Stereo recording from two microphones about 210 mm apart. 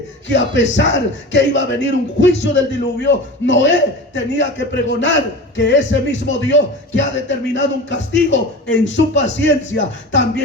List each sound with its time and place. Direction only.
0.3 s a man's voice: 60° left (ahead or behind)